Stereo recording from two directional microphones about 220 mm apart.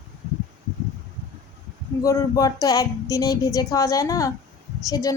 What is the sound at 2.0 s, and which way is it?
A woman's voice, 15° left (ahead or behind).